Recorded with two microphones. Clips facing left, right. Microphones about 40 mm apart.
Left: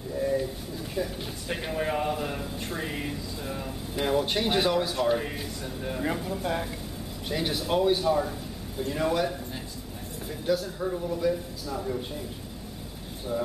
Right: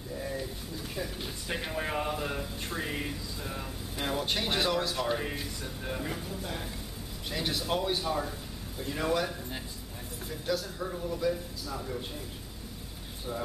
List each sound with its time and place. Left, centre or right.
0.2 s a sound: centre
0.9 s speech: centre
7.2 s speech: centre
10.4 s speech: centre